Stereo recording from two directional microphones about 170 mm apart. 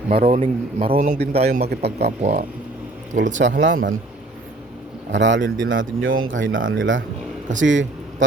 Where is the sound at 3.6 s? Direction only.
90° right.